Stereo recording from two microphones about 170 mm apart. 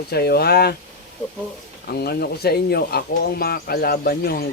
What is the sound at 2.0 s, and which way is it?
Speech, 70° left (ahead or behind).